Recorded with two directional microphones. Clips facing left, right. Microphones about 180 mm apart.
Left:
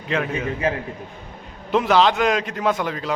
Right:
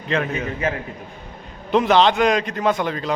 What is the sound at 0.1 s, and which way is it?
Speech, centre (ahead or behind).